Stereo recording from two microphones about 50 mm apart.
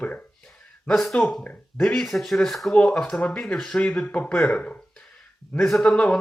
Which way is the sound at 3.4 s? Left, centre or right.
Centre.